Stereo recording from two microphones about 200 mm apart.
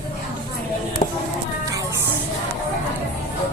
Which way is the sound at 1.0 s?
35° left (ahead or behind).